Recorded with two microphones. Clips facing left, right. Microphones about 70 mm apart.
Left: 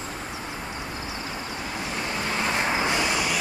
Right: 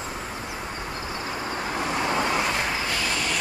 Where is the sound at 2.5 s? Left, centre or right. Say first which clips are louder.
Left 2 dB; left.